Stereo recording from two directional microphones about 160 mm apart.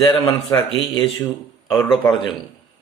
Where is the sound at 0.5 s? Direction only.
20° left (ahead or behind).